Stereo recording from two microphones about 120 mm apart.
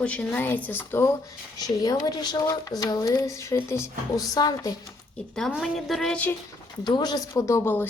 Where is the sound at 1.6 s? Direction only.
30° left (ahead or behind).